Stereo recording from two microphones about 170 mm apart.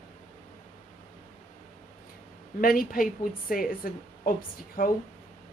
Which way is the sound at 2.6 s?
60° left (ahead or behind).